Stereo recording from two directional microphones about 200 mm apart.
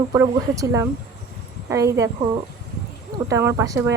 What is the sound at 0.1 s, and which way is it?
Speech, 15° right (ahead or behind).